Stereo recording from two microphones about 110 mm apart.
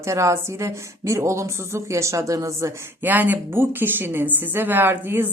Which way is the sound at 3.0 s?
15° right (ahead or behind).